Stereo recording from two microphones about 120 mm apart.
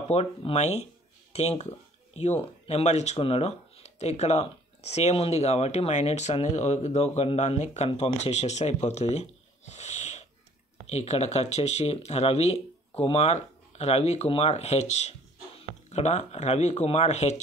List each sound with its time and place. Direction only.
0.1 s speech: 60° left (ahead or behind)
3.2 s speech: 55° left (ahead or behind)